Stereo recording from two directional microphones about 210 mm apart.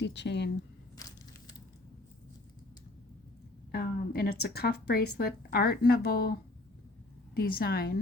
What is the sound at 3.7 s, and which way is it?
A woman's voice, 45° left (ahead or behind).